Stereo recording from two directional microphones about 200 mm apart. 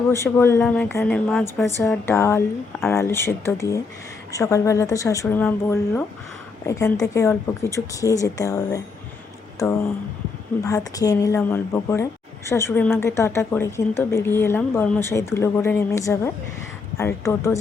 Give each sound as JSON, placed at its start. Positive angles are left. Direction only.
{"t": 0.1, "sound": "a woman's voice", "side_deg": 10}